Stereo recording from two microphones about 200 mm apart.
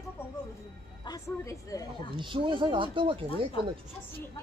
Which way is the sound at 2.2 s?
25° right (ahead or behind).